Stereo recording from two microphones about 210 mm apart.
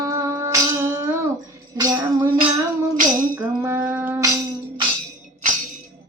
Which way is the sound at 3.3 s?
10° right (ahead or behind).